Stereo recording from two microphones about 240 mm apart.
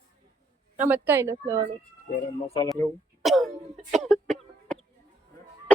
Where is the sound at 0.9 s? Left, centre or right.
Centre.